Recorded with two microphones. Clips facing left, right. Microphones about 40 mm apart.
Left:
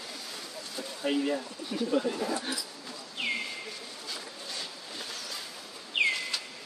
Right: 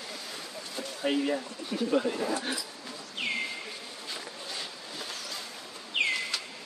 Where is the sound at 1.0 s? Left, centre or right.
Centre.